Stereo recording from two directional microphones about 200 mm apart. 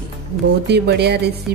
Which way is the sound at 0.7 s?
55° right (ahead or behind).